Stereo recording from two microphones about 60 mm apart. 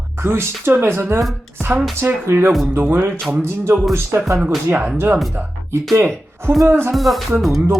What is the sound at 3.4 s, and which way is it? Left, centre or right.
Speech, right.